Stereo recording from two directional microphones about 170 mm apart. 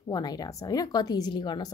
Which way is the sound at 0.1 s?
20° left (ahead or behind).